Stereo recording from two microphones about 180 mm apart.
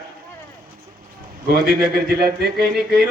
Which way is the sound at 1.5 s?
60° right (ahead or behind).